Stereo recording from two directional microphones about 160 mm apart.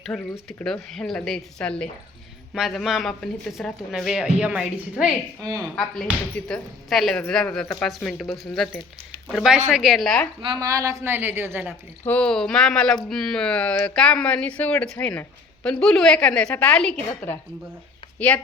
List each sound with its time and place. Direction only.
0.1 s speech: 5° left (ahead or behind)
10.4 s a woman's voice: 25° right (ahead or behind)
12.0 s speech: 5° left (ahead or behind)
18.2 s speech: 10° left (ahead or behind)